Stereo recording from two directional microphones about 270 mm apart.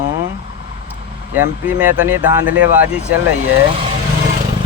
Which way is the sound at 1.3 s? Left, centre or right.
Centre.